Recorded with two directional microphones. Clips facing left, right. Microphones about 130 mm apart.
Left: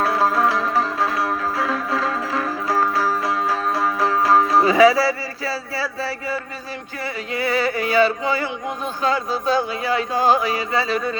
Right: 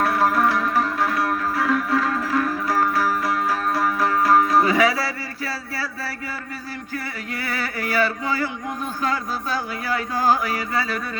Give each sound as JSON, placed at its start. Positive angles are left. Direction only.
{"t": 0.0, "sound": "music", "side_deg": 25}
{"t": 6.0, "sound": "speech", "side_deg": 20}